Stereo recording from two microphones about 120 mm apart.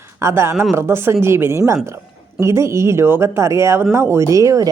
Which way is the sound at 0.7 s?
20° right (ahead or behind).